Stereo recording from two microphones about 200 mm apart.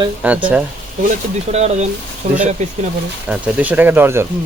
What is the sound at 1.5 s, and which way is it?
Speech, 30° right (ahead or behind).